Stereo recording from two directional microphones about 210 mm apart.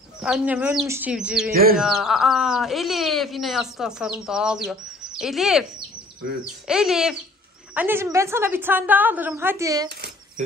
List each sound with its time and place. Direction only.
0.2 s speech: 5° right (ahead or behind)
1.5 s bird: 45° right (ahead or behind)
1.8 s a woman's voice: centre (ahead or behind)
9.8 s a sound: 50° right (ahead or behind)